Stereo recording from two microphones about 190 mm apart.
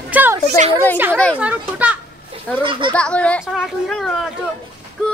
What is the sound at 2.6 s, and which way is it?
Speech, 25° right (ahead or behind).